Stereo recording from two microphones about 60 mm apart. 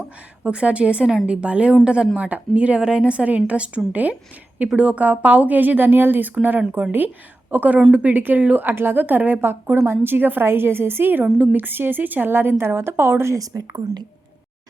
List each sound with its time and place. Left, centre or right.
0.4 s a woman's voice: right
8.6 s a woman's voice: right
13.3 s a woman's voice: right